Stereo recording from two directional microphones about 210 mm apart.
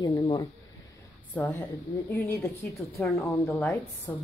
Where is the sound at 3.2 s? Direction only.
15° left (ahead or behind).